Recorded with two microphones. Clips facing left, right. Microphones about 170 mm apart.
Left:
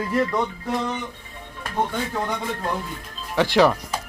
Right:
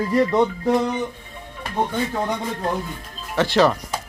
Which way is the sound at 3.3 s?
15° left (ahead or behind).